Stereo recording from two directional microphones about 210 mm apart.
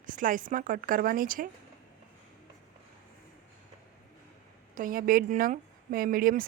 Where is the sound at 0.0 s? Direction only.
40° right (ahead or behind).